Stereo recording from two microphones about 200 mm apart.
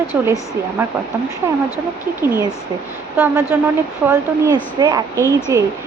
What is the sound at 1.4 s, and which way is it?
A woman's voice, 10° right (ahead or behind).